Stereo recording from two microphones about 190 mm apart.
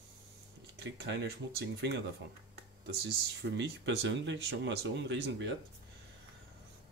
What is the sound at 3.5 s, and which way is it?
Speech, 70° right (ahead or behind).